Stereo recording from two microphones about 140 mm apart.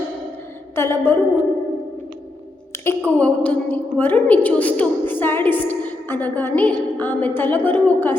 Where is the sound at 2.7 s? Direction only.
20° left (ahead or behind).